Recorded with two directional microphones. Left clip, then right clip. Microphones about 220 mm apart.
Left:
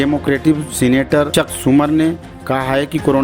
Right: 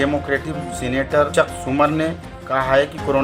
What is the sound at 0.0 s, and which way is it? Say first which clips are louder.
Speech: left 4 dB; 40° left (ahead or behind).